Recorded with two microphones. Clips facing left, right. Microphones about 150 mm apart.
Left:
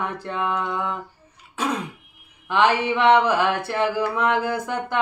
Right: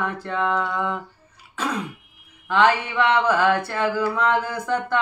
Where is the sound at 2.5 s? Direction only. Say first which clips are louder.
Even; 15° left (ahead or behind).